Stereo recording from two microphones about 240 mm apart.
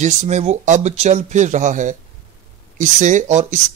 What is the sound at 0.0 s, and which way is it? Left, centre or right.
Speech, right.